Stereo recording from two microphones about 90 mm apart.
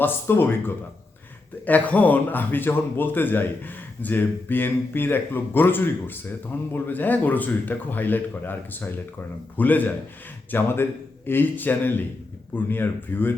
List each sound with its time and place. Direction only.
0.0 s speech: 25° left (ahead or behind)